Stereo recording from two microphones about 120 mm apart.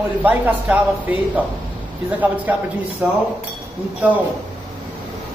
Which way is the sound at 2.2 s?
15° right (ahead or behind).